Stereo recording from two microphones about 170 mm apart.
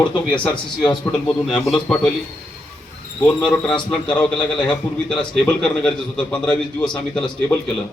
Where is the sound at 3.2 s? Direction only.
5° left (ahead or behind).